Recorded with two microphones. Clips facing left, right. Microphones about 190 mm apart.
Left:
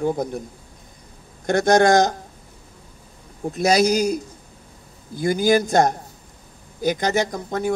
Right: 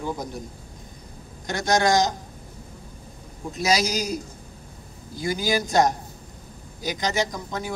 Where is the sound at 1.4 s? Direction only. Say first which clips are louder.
Left 6 dB; 55° left (ahead or behind).